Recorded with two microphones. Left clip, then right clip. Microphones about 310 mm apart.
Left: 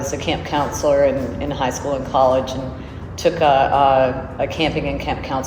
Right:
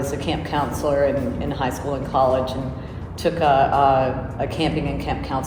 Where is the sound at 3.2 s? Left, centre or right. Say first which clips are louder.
Left 3 dB; centre.